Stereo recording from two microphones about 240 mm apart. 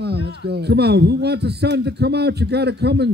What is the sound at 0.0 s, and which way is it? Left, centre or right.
A man's voice, right.